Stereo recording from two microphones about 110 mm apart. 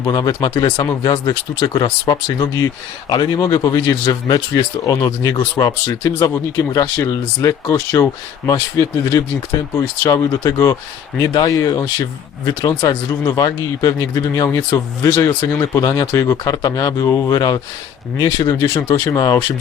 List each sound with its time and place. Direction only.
0.0 s speech: 35° left (ahead or behind)